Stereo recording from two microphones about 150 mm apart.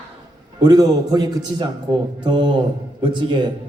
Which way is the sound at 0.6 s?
25° right (ahead or behind).